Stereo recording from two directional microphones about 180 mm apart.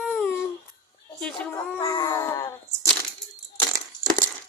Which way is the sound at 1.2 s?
5° left (ahead or behind).